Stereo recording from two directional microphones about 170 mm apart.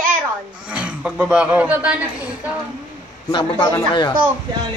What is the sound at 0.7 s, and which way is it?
A man's voice, 5° right (ahead or behind).